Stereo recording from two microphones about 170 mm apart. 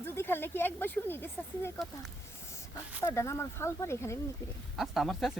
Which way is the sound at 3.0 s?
15° left (ahead or behind).